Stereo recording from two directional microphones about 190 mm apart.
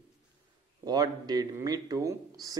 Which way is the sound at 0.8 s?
20° right (ahead or behind).